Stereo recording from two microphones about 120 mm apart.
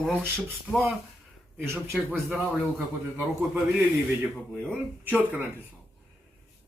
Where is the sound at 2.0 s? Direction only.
5° right (ahead or behind).